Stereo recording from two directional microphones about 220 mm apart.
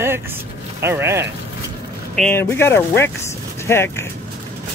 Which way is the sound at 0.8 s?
10° right (ahead or behind).